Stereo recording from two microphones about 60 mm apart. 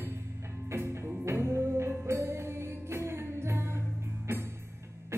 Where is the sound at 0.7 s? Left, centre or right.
Right.